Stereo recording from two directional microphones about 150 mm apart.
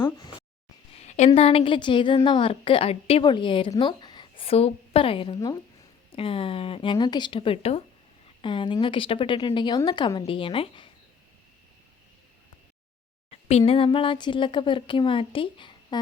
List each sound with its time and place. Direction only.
1.0 s a sound: 50° left (ahead or behind)
1.3 s a woman's voice: 40° left (ahead or behind)
13.3 s speech: 45° left (ahead or behind)